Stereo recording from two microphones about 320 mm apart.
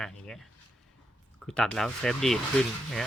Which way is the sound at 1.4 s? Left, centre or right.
Centre.